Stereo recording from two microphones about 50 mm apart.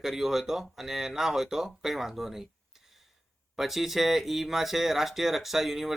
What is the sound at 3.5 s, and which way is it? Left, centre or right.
Speech, centre.